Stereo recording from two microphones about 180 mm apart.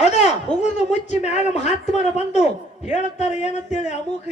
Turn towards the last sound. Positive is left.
turn(degrees=40)  # may be behind; listen again after turning